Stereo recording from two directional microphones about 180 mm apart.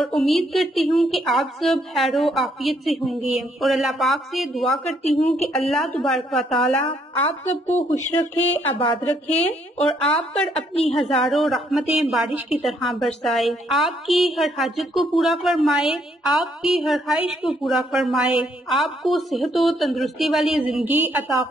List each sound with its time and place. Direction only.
0.0 s a woman's voice: centre (ahead or behind)
8.2 s speech: 10° left (ahead or behind)
9.8 s a woman's voice: 5° left (ahead or behind)